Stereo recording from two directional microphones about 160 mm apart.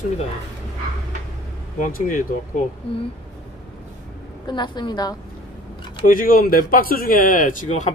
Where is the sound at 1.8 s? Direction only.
60° left (ahead or behind).